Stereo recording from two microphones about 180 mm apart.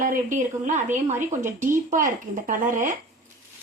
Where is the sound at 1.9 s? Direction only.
50° right (ahead or behind).